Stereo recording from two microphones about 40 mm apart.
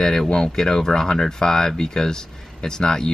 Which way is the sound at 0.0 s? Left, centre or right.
Centre.